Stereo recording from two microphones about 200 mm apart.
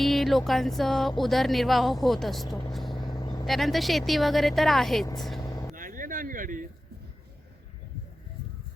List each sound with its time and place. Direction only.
0.0 s speech: centre (ahead or behind)
2.9 s vehicle: 20° left (ahead or behind)
3.4 s speech: centre (ahead or behind)
5.4 s vehicle: 20° left (ahead or behind)
5.7 s a sound: 40° right (ahead or behind)